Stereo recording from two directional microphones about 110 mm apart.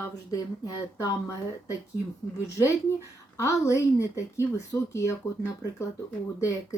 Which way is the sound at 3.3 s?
30° left (ahead or behind).